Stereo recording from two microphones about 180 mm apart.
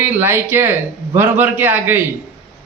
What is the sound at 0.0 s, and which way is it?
Speech, 10° right (ahead or behind).